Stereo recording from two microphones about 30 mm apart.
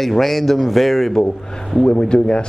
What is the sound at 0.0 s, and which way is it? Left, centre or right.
A man's voice, centre.